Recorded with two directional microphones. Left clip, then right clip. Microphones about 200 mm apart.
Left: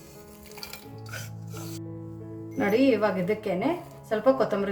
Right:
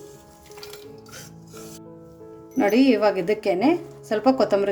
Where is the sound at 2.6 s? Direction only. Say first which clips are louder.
Right 4 dB; 40° right (ahead or behind).